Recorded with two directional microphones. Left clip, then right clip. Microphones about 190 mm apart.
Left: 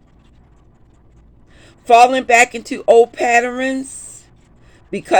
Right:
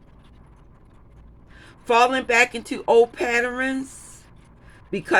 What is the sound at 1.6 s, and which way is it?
A man's voice, 15° left (ahead or behind).